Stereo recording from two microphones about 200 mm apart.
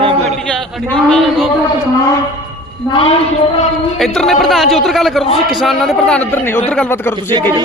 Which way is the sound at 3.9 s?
Centre (ahead or behind).